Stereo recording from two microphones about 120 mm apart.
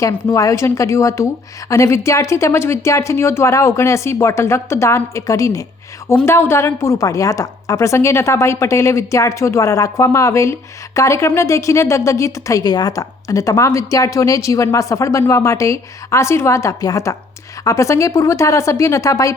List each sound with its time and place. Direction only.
0.3 s a woman's voice: 25° left (ahead or behind)